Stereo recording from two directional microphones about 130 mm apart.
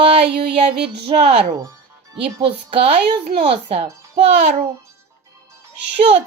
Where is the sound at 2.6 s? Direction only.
50° right (ahead or behind).